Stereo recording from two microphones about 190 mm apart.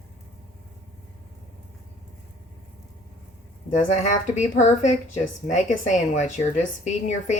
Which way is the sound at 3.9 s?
35° left (ahead or behind).